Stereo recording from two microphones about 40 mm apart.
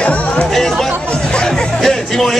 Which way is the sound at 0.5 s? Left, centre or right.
Centre.